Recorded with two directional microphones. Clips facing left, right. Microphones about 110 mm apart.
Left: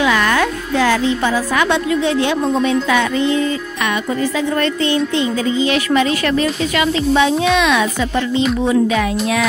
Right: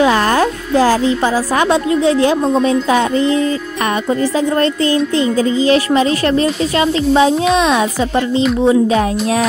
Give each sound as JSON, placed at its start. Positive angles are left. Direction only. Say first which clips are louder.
{"t": 0.0, "sound": "speech", "louder": "right 3 dB", "side_deg": -35}